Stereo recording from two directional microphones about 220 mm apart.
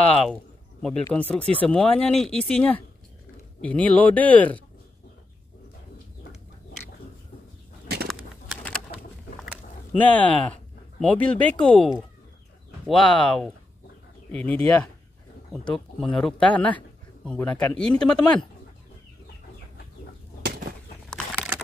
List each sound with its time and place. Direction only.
0.1 s a sound: centre (ahead or behind)
0.8 s a man's voice: 5° left (ahead or behind)
8.5 s pigeon: centre (ahead or behind)
9.9 s a man's voice: 5° left (ahead or behind)
20.4 s bird flight: 50° right (ahead or behind)